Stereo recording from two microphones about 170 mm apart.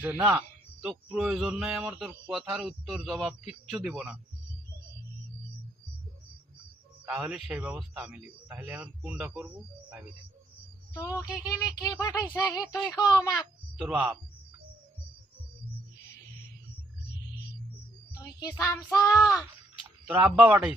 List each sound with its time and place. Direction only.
0.0 s speech: 10° right (ahead or behind)
7.0 s speech: 5° right (ahead or behind)
10.9 s child singing: 20° left (ahead or behind)
13.3 s speech: 5° right (ahead or behind)
18.2 s child singing: 25° left (ahead or behind)
20.1 s speech: 10° right (ahead or behind)